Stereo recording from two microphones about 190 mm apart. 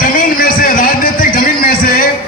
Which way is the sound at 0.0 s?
50° left (ahead or behind).